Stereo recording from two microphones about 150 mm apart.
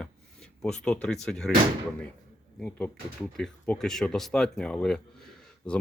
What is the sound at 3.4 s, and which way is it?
Speech, 5° left (ahead or behind).